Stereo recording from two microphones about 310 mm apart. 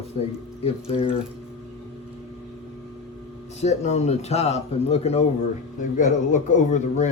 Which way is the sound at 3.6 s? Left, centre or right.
Left.